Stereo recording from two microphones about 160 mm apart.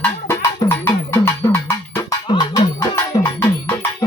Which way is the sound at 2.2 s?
25° left (ahead or behind).